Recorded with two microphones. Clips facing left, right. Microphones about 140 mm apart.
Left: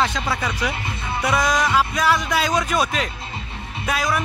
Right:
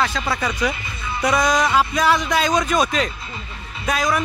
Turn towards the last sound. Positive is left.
turn(degrees=5)  # may be behind; listen again after turning